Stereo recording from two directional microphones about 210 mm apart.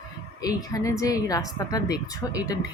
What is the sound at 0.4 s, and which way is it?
A woman's voice, 15° left (ahead or behind).